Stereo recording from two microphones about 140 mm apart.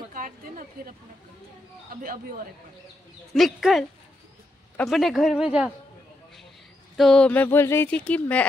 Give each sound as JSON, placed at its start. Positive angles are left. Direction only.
{"t": 0.1, "sound": "a sound", "side_deg": -75}
{"t": 3.3, "sound": "speech", "side_deg": 0}
{"t": 4.8, "sound": "speech", "side_deg": 0}
{"t": 7.0, "sound": "speech", "side_deg": 5}